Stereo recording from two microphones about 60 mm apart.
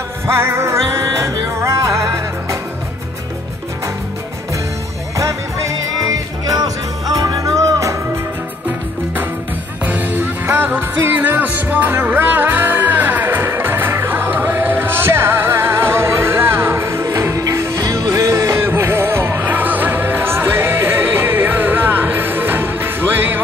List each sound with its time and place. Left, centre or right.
0.3 s music: right
5.9 s music: right
7.2 s music: right
9.8 s music: right
17.3 s music: right
18.6 s music: right
19.4 s music: right